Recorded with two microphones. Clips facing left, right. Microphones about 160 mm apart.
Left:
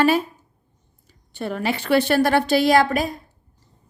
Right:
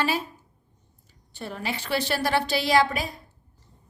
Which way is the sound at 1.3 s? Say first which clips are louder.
Left 8 dB; 65° left (ahead or behind).